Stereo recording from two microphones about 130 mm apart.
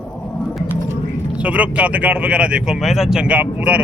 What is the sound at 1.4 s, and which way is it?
Speech, 10° right (ahead or behind).